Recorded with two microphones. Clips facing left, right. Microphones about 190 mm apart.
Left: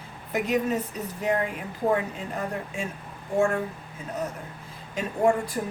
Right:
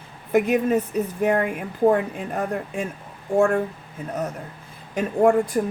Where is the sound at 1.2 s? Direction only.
55° right (ahead or behind).